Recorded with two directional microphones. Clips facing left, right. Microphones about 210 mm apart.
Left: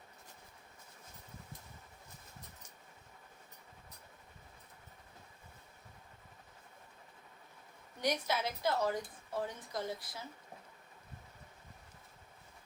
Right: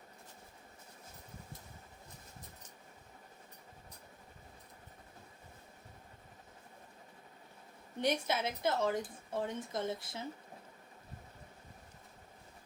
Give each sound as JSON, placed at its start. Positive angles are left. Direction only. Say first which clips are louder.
{"t": 8.0, "sound": "a woman's voice", "louder": "right 1 dB", "side_deg": -25}